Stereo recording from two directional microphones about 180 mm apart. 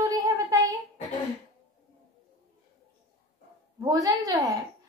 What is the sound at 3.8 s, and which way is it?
Speech, 20° right (ahead or behind).